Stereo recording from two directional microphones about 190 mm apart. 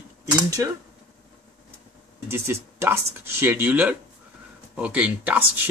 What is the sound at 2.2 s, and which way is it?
Speech, 15° right (ahead or behind).